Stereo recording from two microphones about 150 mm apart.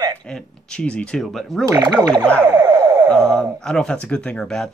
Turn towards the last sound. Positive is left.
turn(degrees=5)  # may be behind; listen again after turning